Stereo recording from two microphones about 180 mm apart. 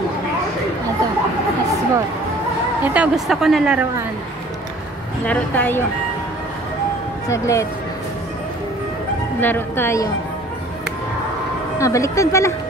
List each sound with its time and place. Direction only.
2.8 s a woman's voice: 5° right (ahead or behind)
5.2 s a woman's voice: 10° left (ahead or behind)
7.2 s a woman's voice: 15° left (ahead or behind)
9.4 s a woman's voice: 10° left (ahead or behind)
11.8 s a woman's voice: 15° left (ahead or behind)